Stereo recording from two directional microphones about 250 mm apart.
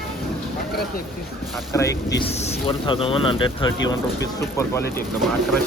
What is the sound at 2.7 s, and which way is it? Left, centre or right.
Speech, left.